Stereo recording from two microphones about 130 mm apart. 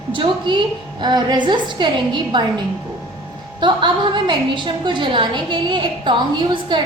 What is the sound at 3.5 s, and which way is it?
A woman's voice, 40° right (ahead or behind).